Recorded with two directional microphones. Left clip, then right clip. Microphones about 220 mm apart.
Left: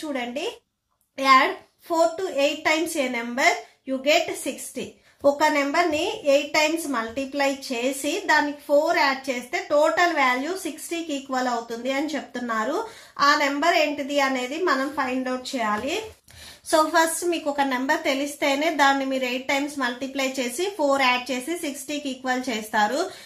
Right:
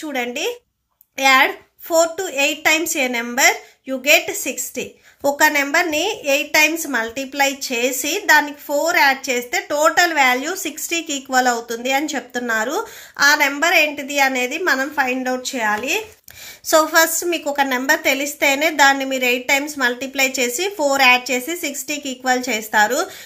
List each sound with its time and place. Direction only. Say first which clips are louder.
0.1 s a woman's voice: right 7 dB; 35° right (ahead or behind)